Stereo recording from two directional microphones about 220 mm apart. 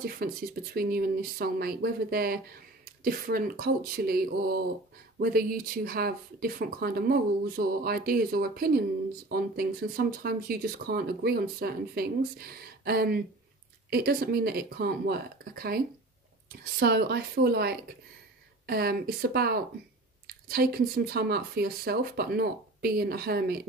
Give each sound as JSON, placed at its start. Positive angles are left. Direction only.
{"t": 0.0, "sound": "speech", "side_deg": -40}
{"t": 16.8, "sound": "speech", "side_deg": -45}